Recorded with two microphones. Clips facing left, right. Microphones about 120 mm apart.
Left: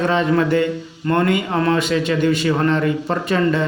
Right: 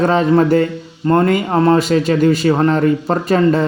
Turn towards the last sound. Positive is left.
turn(degrees=-40)  # may be behind; listen again after turning